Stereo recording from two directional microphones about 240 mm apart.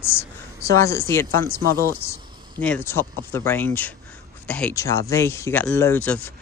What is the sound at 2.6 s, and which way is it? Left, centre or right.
Speech, centre.